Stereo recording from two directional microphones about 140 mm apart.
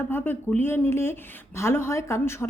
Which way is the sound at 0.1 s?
15° left (ahead or behind).